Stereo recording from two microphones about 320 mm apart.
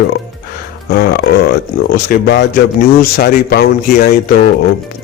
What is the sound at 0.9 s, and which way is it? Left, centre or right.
Speech, left.